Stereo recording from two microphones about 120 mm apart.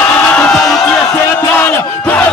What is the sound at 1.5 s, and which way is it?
Speech, 15° left (ahead or behind).